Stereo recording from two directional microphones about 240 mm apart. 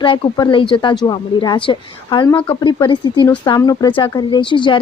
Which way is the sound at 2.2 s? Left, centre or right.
Centre.